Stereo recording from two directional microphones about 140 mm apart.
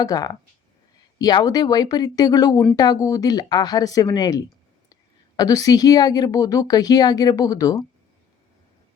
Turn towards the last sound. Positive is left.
turn(degrees=25)  # may be behind; listen again after turning